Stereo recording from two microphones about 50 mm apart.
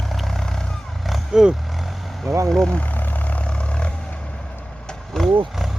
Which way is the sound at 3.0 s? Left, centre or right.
Left.